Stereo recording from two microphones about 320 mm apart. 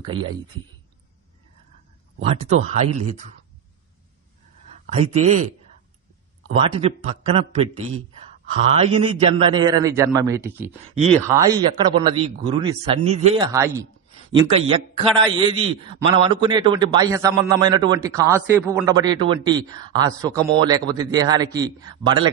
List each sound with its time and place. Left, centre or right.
0.0 s a man's voice: centre
2.7 s a man's voice: centre
4.9 s a man's voice: centre
6.5 s a man's voice: centre